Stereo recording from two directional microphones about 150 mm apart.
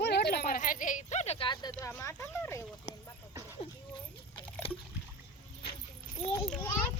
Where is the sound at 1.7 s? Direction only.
20° left (ahead or behind).